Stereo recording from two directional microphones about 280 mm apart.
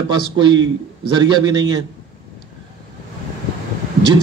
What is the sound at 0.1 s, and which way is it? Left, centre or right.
A man's voice, centre.